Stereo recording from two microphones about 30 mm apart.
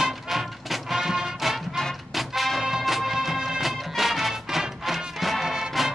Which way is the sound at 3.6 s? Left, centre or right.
Centre.